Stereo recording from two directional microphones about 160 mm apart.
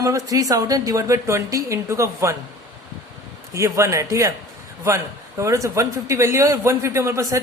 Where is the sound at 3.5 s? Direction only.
20° right (ahead or behind).